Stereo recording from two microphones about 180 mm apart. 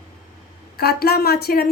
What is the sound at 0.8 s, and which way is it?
Speech, 60° left (ahead or behind).